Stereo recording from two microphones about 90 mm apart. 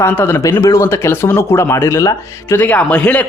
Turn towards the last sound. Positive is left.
turn(degrees=15)  # may be behind; listen again after turning